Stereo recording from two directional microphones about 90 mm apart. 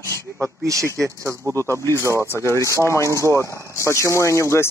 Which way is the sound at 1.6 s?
30° left (ahead or behind).